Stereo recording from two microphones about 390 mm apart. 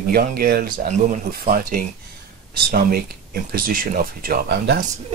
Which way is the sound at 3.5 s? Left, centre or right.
Right.